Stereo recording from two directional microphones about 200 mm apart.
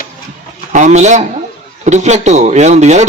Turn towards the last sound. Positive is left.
turn(degrees=-35)  # may be behind; listen again after turning